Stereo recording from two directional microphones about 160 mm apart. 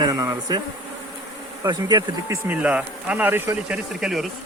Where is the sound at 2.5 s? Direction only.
10° right (ahead or behind).